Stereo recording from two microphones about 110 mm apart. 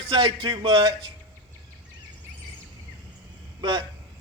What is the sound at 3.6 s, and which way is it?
Speech, 45° right (ahead or behind).